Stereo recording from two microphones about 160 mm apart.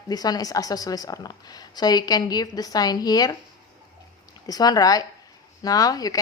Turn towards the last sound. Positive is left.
turn(degrees=25)  # may be behind; listen again after turning